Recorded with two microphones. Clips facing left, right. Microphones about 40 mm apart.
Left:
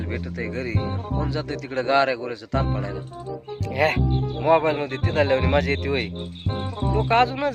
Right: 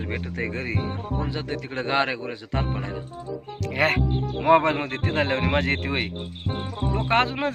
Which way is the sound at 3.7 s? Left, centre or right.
Right.